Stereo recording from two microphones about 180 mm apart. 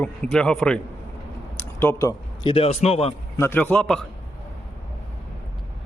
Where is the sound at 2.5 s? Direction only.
35° left (ahead or behind).